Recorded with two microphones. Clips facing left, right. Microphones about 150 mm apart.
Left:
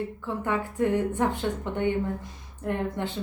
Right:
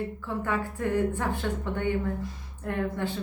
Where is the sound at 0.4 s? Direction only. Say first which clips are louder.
Left 4 dB; 20° left (ahead or behind).